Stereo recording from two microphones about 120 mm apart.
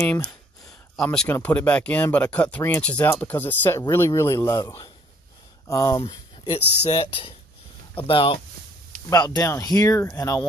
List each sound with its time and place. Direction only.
0.0 s speech: 10° left (ahead or behind); by 8.4 s 45° left (ahead or behind)
9.1 s speech: 25° left (ahead or behind)